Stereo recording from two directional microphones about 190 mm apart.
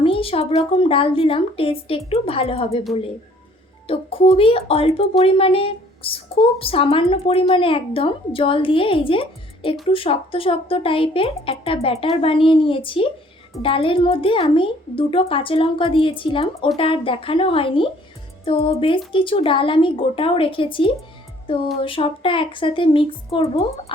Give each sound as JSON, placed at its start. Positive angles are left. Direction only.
{"t": 0.0, "sound": "a woman's voice", "side_deg": 30}
{"t": 3.8, "sound": "a woman's voice", "side_deg": 30}